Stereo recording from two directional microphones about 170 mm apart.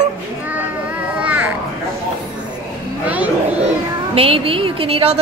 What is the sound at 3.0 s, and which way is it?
Speech, 10° right (ahead or behind).